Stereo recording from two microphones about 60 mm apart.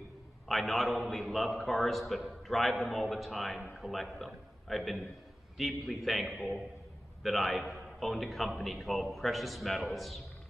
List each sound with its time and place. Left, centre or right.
0.5 s a man's voice: centre